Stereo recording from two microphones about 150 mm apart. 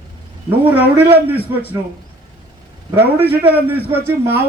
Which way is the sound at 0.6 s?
10° right (ahead or behind).